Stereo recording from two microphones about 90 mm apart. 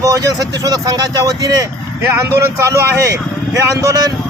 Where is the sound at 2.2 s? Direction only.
35° right (ahead or behind).